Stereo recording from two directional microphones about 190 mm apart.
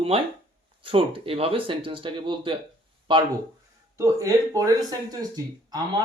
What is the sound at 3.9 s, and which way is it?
Speech, 15° right (ahead or behind).